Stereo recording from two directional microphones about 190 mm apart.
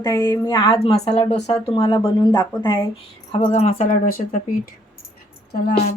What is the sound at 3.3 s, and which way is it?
Speech, 30° left (ahead or behind).